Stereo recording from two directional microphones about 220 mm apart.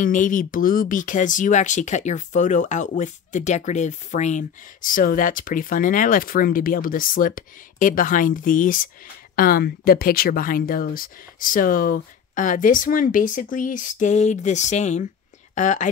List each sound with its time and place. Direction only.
0.0 s speech: 35° left (ahead or behind)